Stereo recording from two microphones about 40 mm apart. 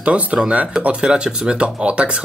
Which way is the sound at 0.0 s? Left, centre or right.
Right.